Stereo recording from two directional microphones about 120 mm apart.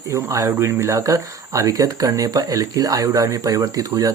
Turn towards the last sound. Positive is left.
turn(degrees=-30)  # may be behind; listen again after turning